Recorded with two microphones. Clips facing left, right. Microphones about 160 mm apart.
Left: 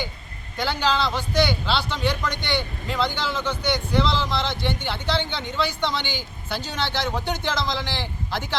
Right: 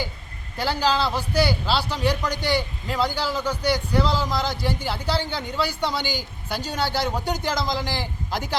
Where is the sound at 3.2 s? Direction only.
35° right (ahead or behind).